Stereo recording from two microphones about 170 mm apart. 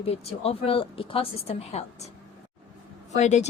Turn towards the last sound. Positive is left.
turn(degrees=45)  # may be behind; listen again after turning